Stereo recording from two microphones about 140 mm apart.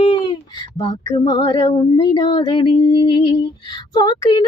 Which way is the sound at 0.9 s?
30° left (ahead or behind).